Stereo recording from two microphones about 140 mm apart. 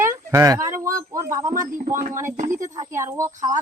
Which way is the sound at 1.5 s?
70° right (ahead or behind).